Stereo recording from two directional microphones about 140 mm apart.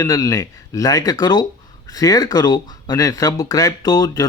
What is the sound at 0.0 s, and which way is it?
Speech, 25° left (ahead or behind).